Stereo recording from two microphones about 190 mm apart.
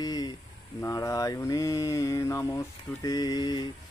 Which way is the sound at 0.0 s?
20° left (ahead or behind).